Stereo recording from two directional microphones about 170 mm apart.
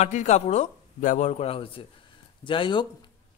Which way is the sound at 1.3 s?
35° left (ahead or behind).